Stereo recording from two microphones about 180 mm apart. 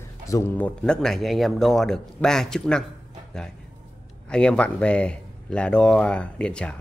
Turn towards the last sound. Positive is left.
turn(degrees=5)  # may be behind; listen again after turning